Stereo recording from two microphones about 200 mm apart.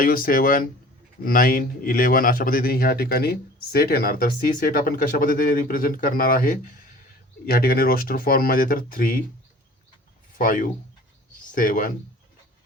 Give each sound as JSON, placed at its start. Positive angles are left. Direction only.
{"t": 0.0, "sound": "a man's voice", "side_deg": 45}
{"t": 10.3, "sound": "a man's voice", "side_deg": 40}